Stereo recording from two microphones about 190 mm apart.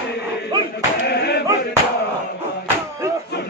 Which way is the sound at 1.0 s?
60° left (ahead or behind).